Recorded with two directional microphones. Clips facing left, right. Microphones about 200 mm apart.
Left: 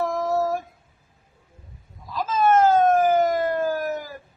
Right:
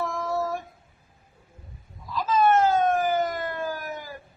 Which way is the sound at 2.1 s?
45° left (ahead or behind).